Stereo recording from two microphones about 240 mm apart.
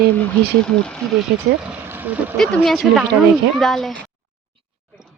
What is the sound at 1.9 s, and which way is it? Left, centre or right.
Speech, centre.